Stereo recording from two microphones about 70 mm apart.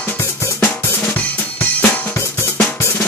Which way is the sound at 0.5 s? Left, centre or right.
Left.